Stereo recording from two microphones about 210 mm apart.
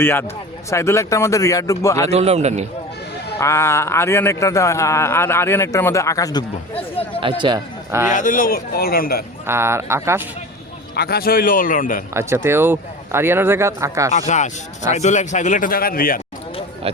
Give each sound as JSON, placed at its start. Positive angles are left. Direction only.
{"t": 0.0, "sound": "speech", "side_deg": 10}
{"t": 2.0, "sound": "speech", "side_deg": -30}
{"t": 3.4, "sound": "speech", "side_deg": 15}
{"t": 7.2, "sound": "a man's voice", "side_deg": -25}
{"t": 8.1, "sound": "a man's voice", "side_deg": 40}
{"t": 9.5, "sound": "speech", "side_deg": -10}
{"t": 10.9, "sound": "a man's voice", "side_deg": 45}
{"t": 12.1, "sound": "speech", "side_deg": -10}
{"t": 14.1, "sound": "a man's voice", "side_deg": 35}
{"t": 16.8, "sound": "speech", "side_deg": -25}